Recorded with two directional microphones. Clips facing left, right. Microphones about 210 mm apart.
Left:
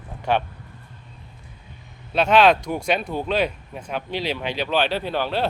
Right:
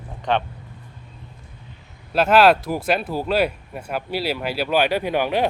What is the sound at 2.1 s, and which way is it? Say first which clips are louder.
Speech: right 1 dB; 5° right (ahead or behind).